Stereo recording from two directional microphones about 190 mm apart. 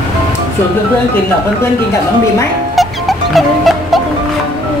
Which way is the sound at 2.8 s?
Centre (ahead or behind).